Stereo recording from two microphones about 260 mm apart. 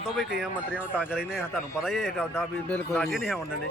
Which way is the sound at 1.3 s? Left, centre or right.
Centre.